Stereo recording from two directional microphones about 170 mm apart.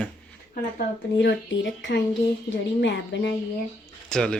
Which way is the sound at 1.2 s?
90° left.